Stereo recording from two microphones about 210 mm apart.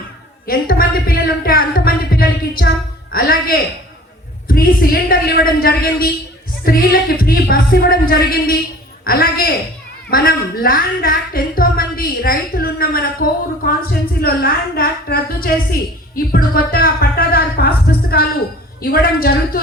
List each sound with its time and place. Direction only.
0.4 s a woman's voice: 45° left (ahead or behind)